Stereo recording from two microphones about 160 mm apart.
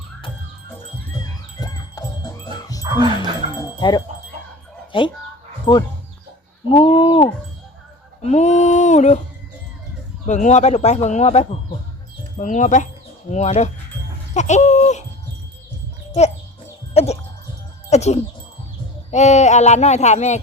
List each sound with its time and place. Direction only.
1.5 s music: 25° left (ahead or behind)
4.9 s speech: 30° left (ahead or behind)
8.2 s speech: 45° left (ahead or behind)
10.2 s speech: 50° left (ahead or behind)
16.9 s a sound: 40° left (ahead or behind)
17.9 s speech: 45° left (ahead or behind)